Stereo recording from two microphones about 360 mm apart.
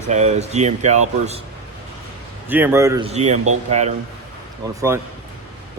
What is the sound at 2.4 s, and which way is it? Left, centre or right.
Speech, centre.